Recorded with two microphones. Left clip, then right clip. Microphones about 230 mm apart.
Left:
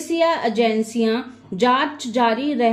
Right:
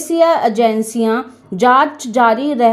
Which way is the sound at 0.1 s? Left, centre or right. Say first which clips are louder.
Right 7 dB; right.